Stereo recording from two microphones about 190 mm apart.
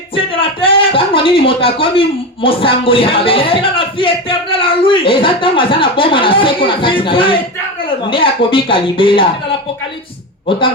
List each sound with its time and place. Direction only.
0.6 s speech: 30° left (ahead or behind)